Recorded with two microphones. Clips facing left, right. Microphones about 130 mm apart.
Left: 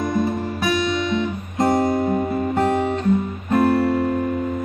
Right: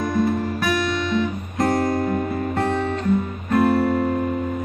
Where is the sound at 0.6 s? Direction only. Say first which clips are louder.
Left 5 dB; 20° left (ahead or behind).